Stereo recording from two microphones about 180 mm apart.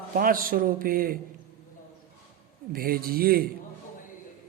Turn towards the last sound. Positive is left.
turn(degrees=-55)  # may be behind; listen again after turning